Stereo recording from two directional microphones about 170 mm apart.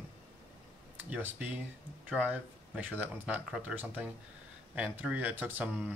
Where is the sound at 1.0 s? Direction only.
10° right (ahead or behind).